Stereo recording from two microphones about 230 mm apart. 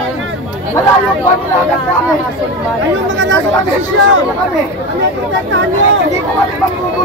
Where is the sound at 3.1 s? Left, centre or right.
Right.